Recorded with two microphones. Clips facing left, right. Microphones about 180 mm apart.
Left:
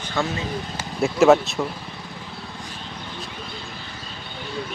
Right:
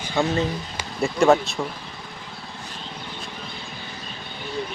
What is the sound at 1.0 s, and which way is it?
Speech, centre (ahead or behind).